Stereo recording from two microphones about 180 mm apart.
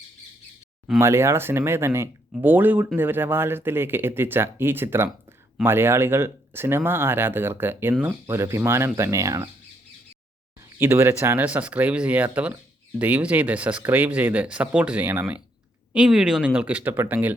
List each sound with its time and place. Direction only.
0.9 s speech: 15° right (ahead or behind)
10.8 s speech: 15° right (ahead or behind)